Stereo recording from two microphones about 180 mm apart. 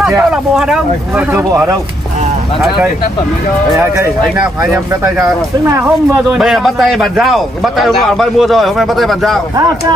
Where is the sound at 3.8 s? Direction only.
15° right (ahead or behind).